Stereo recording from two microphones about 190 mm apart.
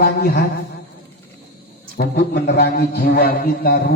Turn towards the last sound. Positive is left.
turn(degrees=55)  # may be behind; listen again after turning